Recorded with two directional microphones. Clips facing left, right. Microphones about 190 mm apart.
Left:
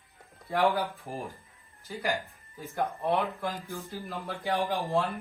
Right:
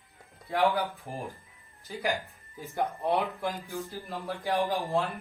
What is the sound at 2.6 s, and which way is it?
Speech, 15° right (ahead or behind).